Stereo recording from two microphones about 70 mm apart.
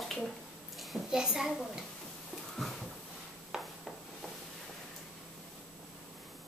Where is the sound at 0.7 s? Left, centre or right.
Centre.